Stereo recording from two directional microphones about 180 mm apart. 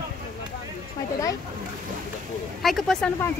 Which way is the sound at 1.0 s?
20° left (ahead or behind).